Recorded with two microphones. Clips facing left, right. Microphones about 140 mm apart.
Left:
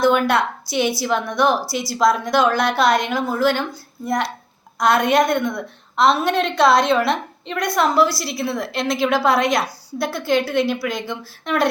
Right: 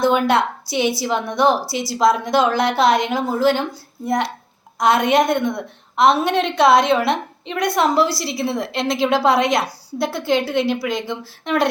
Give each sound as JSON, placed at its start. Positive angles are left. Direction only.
{"t": 0.0, "sound": "a woman's voice", "side_deg": -20}